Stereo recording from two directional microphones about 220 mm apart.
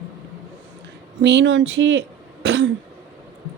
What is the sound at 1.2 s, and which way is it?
Speech, 55° right (ahead or behind).